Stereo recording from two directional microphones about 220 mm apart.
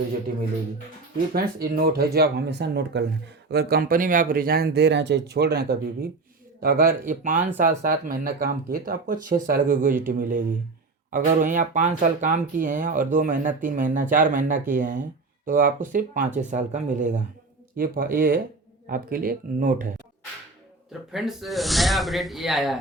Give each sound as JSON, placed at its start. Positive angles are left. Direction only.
{"t": 1.3, "sound": "speech", "side_deg": -45}
{"t": 21.1, "sound": "speech", "side_deg": 0}